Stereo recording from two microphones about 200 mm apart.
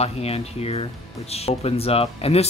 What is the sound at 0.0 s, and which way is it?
Speech, 30° left (ahead or behind).